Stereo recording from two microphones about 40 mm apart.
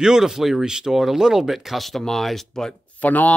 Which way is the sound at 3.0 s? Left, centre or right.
Left.